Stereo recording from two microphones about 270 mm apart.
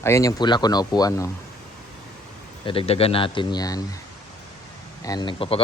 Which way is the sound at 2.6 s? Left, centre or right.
Centre.